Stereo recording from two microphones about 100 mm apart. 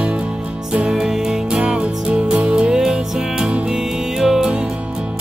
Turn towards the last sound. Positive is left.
turn(degrees=-5)  # may be behind; listen again after turning